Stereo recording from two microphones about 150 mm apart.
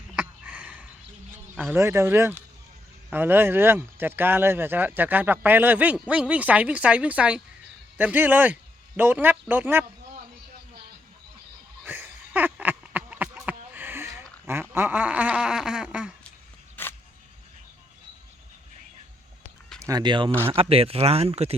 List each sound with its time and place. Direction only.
0.2 s sniff: 10° right (ahead or behind)
1.3 s speech: 15° right (ahead or behind)
11.9 s a sound: 15° right (ahead or behind)
14.4 s speech: 15° right (ahead or behind)
16.8 s a sound: 10° left (ahead or behind)
19.8 s speech: 25° right (ahead or behind); by 21.5 s 45° right (ahead or behind)